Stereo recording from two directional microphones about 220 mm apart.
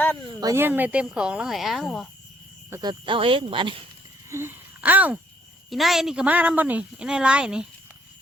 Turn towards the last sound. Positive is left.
turn(degrees=-5)  # may be behind; listen again after turning